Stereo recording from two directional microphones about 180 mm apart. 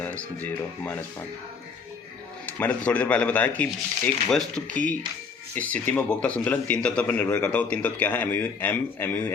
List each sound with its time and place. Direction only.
0.0 s a man's voice: 10° left (ahead or behind)
2.5 s a man's voice: 10° left (ahead or behind)